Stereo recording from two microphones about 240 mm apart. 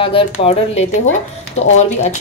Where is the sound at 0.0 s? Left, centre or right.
Left.